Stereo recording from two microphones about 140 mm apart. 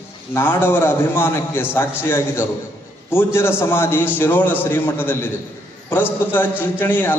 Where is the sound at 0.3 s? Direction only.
15° left (ahead or behind).